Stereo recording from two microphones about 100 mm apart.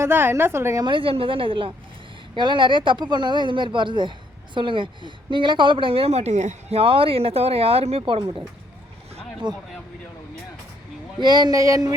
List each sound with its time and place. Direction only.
0.0 s a woman's voice: 25° right (ahead or behind)
0.9 s a woman's voice: 60° right (ahead or behind)
9.4 s speech: 50° right (ahead or behind)
11.2 s speech: 45° right (ahead or behind)